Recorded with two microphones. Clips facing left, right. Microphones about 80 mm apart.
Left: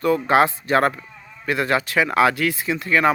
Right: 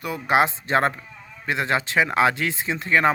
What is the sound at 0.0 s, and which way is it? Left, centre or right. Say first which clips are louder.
Speech: left 4 dB; centre.